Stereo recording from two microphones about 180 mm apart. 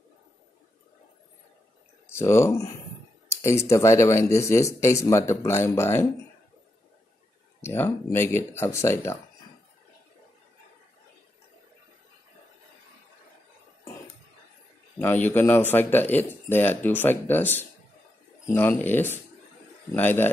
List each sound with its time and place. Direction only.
2.0 s a man's voice: 15° left (ahead or behind)
7.6 s a man's voice: 10° left (ahead or behind)
15.0 s a man's voice: 10° left (ahead or behind)